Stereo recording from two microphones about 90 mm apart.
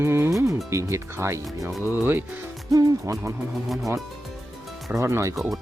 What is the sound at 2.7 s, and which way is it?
Speech, 40° right (ahead or behind).